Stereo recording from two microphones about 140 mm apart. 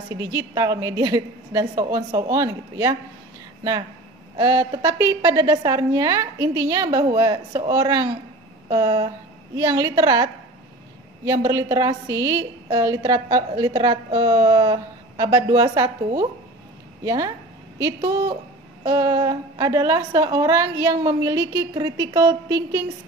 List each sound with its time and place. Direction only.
0.1 s a woman's voice: 25° right (ahead or behind)
4.4 s a woman's voice: 30° right (ahead or behind)
17.0 s a woman's voice: 25° right (ahead or behind)